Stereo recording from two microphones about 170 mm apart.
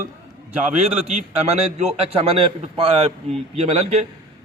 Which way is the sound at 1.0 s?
40° right (ahead or behind).